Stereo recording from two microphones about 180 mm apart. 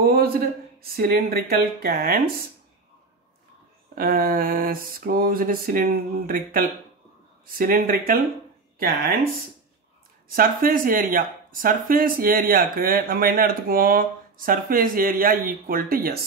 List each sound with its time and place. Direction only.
0.0 s a sound: 60° right (ahead or behind)
0.9 s speech: 60° right (ahead or behind)
3.9 s speech: 55° right (ahead or behind)
10.3 s speech: 55° right (ahead or behind)